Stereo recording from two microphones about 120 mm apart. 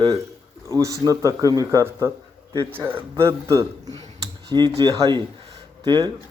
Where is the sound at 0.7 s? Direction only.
25° right (ahead or behind).